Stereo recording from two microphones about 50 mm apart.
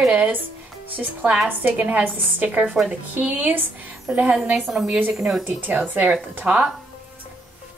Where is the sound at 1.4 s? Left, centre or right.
Right.